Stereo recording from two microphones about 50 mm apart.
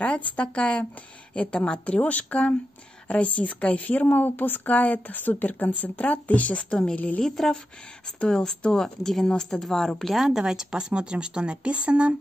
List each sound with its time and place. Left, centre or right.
0.0 s a woman's voice: left
7.2 s speech: centre
10.1 s a woman's voice: centre